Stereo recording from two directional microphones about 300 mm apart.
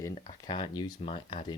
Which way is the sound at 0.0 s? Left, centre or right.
Centre.